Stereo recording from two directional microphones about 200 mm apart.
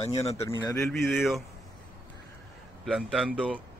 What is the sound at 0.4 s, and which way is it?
Speech, 20° left (ahead or behind).